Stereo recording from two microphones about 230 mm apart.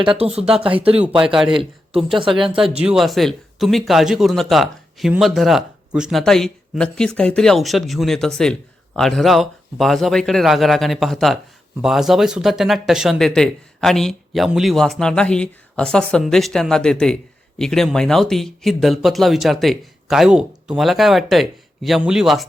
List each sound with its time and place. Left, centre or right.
0.0 s speech: right
0.9 s speech: centre
2.1 s speech: right
2.7 s speech: centre